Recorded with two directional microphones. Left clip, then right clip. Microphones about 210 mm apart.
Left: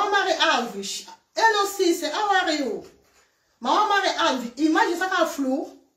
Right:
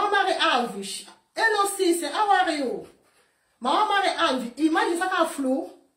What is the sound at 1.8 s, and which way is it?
Speech, 5° right (ahead or behind).